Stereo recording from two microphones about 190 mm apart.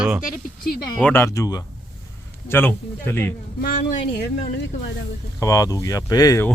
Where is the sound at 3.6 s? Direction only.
45° left (ahead or behind).